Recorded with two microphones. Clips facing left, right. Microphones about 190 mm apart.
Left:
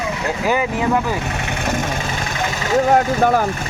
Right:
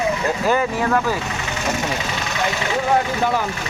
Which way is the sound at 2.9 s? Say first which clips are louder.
Left 2 dB; 45° left (ahead or behind).